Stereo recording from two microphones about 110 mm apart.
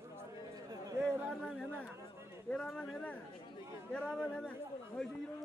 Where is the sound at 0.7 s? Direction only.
30° right (ahead or behind).